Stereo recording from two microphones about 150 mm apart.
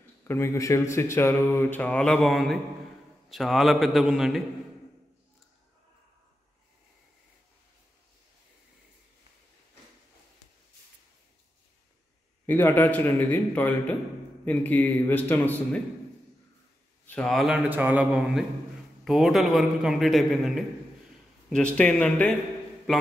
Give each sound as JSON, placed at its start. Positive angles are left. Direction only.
{"t": 0.2, "sound": "a man's voice", "side_deg": 15}
{"t": 12.4, "sound": "speech", "side_deg": 15}
{"t": 17.0, "sound": "a sound", "side_deg": 10}
{"t": 17.3, "sound": "a man's voice", "side_deg": 0}
{"t": 17.6, "sound": "a man's voice", "side_deg": -10}